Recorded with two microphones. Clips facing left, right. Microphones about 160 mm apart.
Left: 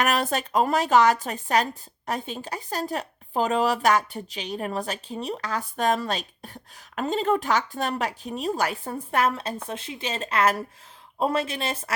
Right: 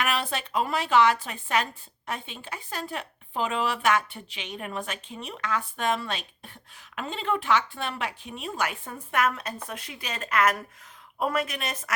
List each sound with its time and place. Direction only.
0.0 s speech: 45° left (ahead or behind)